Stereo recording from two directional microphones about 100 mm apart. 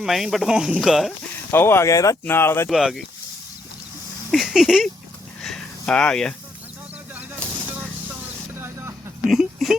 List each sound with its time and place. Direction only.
0.0 s speech: centre (ahead or behind)
1.5 s speech: 25° left (ahead or behind)
2.2 s speech: 25° left (ahead or behind)
2.6 s speech: centre (ahead or behind)
4.3 s speech: 5° right (ahead or behind)
5.4 s a sound: 5° left (ahead or behind)
8.5 s vehicle: 25° right (ahead or behind)
9.2 s a sound: centre (ahead or behind)